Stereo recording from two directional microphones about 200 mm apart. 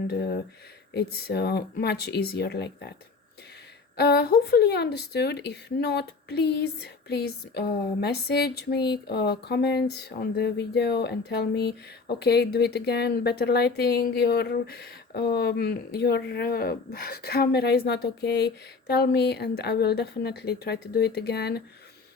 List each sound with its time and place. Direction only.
0.1 s speech: 55° left (ahead or behind)
3.9 s speech: 55° left (ahead or behind)